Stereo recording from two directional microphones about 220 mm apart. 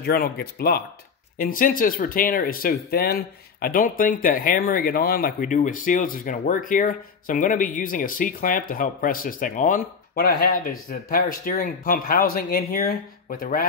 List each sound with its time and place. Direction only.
0.0 s speech: 45° left (ahead or behind)